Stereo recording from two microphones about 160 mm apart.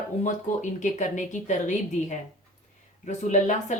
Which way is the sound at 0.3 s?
50° left (ahead or behind).